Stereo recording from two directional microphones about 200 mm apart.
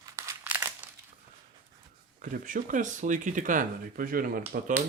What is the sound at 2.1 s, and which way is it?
Speech, 40° right (ahead or behind).